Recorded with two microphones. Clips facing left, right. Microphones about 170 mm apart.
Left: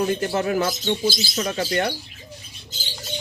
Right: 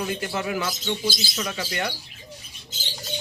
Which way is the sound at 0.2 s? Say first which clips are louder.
Left 6 dB; 40° left (ahead or behind).